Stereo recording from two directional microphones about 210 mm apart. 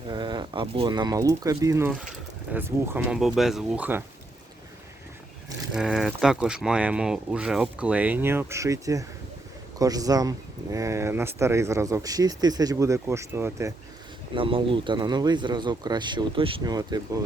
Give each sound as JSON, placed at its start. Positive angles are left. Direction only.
{"t": 0.1, "sound": "speech", "side_deg": -20}
{"t": 5.7, "sound": "speech", "side_deg": 0}
{"t": 14.3, "sound": "speech", "side_deg": -25}